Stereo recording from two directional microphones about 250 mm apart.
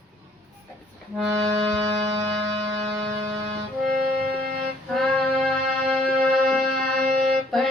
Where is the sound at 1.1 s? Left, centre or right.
Centre.